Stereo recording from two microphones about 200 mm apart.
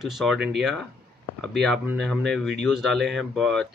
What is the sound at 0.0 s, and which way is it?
Speech, centre (ahead or behind).